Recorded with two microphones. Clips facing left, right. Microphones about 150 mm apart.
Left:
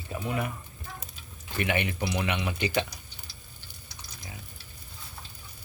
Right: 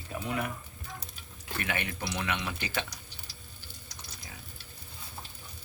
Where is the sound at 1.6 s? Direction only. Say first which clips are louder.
Left 6 dB; 15° left (ahead or behind).